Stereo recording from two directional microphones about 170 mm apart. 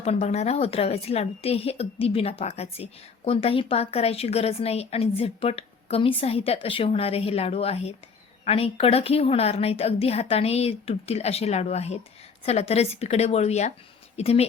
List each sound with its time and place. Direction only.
0.0 s a woman's voice: 40° left (ahead or behind)